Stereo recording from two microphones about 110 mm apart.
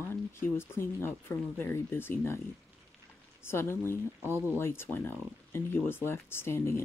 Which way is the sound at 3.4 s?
20° left (ahead or behind).